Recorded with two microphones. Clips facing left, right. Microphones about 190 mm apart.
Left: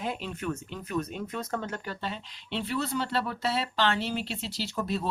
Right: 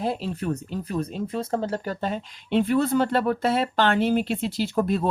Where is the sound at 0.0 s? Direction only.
35° right (ahead or behind).